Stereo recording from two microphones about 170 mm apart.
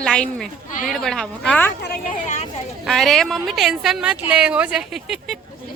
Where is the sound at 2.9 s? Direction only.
Centre (ahead or behind).